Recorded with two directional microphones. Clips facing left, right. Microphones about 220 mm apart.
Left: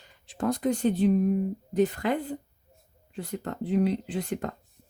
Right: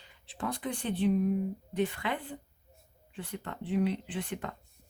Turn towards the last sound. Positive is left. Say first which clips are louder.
# left 6 dB
turn(degrees=40)  # may be behind; listen again after turning